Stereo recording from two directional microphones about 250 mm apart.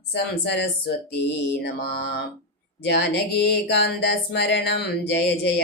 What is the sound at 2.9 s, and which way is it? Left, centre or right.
Speech, left.